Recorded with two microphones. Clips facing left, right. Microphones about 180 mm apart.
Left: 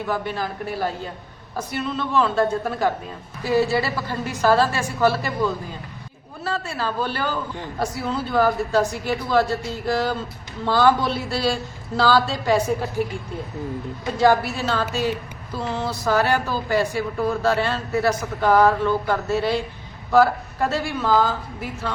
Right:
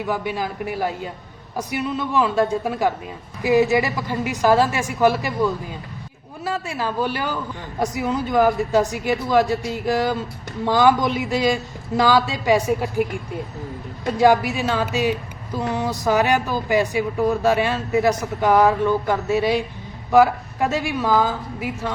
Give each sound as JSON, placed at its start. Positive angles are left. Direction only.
{"t": 0.1, "sound": "speech", "side_deg": -10}
{"t": 14.2, "sound": "speech", "side_deg": -15}